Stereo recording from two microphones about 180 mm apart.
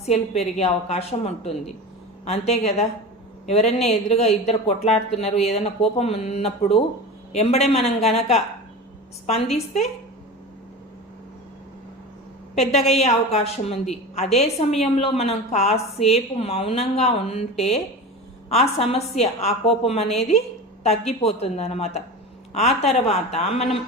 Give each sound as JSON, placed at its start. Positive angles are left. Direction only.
{"t": 0.0, "sound": "a woman's voice", "side_deg": 35}
{"t": 12.5, "sound": "a woman's voice", "side_deg": 35}